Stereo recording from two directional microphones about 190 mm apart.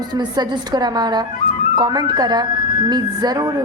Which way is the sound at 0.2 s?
20° right (ahead or behind).